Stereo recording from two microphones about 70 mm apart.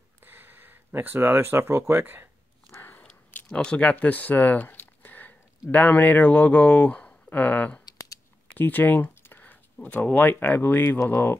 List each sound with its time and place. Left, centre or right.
0.2 s speech: right
2.8 s biting: left
3.4 s speech: centre
8.5 s computer keyboard: left
9.8 s speech: left